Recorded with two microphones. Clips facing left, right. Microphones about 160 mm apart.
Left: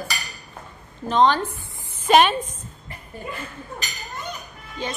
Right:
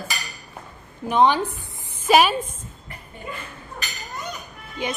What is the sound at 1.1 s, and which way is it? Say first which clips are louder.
A woman's voice: even; 10° right (ahead or behind).